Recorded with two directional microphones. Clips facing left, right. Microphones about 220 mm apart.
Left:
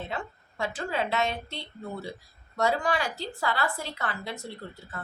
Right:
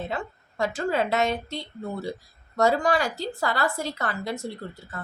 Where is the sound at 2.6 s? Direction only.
40° right (ahead or behind).